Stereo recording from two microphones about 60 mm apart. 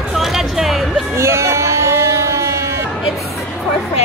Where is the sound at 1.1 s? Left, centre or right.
Right.